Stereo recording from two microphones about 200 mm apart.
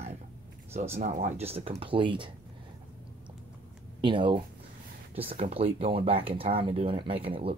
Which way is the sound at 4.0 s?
25° right (ahead or behind).